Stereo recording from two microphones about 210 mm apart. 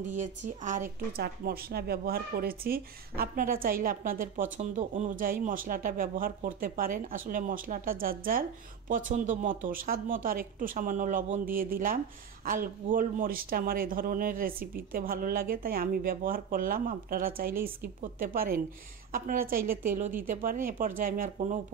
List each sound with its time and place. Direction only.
0.1 s speech: 35° right (ahead or behind)